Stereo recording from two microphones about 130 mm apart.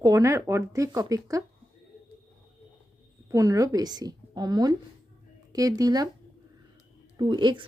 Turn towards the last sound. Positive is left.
turn(degrees=-40)  # may be behind; listen again after turning